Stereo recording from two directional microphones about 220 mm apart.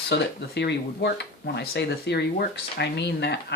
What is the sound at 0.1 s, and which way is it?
Speech, 50° left (ahead or behind).